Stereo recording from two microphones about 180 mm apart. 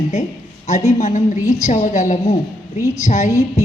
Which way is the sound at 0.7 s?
40° left (ahead or behind).